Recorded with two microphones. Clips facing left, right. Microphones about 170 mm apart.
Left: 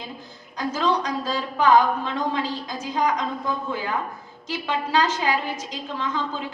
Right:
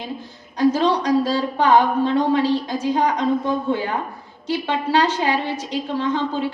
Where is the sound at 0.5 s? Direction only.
30° right (ahead or behind).